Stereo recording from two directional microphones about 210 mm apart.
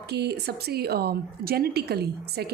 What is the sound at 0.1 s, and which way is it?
Speech, 50° right (ahead or behind).